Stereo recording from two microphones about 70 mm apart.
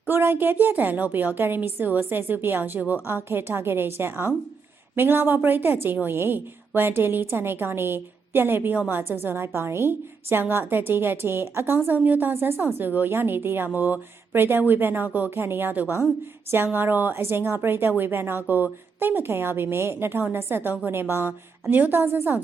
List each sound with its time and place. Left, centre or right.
0.1 s a woman's voice: right